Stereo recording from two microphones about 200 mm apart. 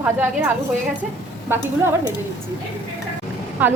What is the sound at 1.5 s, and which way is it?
Speech, 10° right (ahead or behind).